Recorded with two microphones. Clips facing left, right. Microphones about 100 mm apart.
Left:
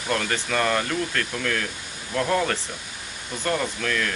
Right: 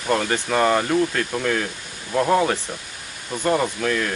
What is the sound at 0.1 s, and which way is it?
Speech, 15° right (ahead or behind).